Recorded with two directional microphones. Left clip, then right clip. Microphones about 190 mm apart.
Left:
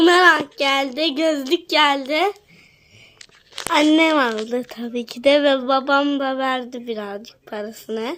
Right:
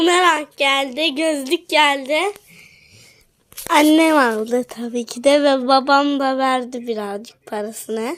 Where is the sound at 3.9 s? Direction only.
15° right (ahead or behind).